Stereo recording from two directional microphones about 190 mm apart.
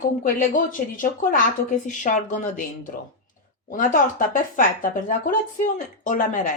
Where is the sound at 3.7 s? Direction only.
45° left (ahead or behind).